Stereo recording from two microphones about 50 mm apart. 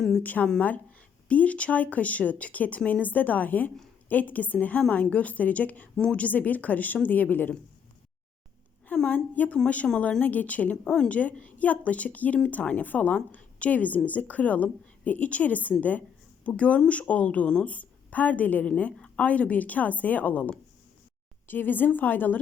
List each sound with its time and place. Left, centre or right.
0.2 s speech: left
4.8 s a woman's voice: centre
6.0 s a woman's voice: centre
6.2 s speech: left
9.0 s a woman's voice: left
10.8 s speech: centre
11.1 s a woman's voice: left